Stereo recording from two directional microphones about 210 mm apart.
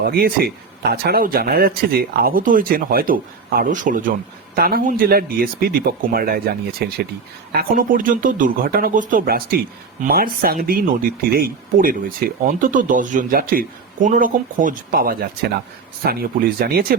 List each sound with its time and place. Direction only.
0.0 s speech: 45° right (ahead or behind)
16.6 s speech: 45° right (ahead or behind)